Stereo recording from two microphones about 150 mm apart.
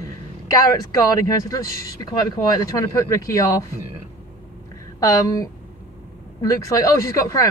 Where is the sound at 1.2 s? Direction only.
20° left (ahead or behind).